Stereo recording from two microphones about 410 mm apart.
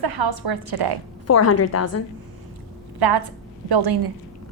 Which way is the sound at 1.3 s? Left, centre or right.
Left.